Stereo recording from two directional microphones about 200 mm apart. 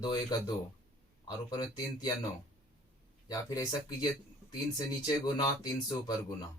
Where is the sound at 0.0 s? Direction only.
20° left (ahead or behind).